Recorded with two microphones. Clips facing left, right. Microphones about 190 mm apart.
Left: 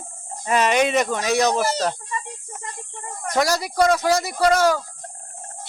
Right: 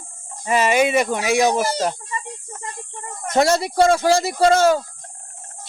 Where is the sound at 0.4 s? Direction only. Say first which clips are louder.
Right 1 dB; 10° right (ahead or behind).